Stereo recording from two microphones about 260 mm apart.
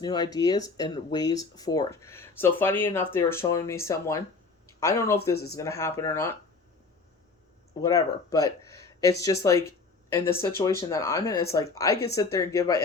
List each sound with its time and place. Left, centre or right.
0.0 s speech: centre
5.3 s speech: left
5.5 s speech: centre
7.8 s speech: centre